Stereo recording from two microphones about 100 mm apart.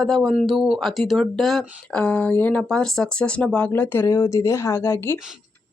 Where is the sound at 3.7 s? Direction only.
25° left (ahead or behind).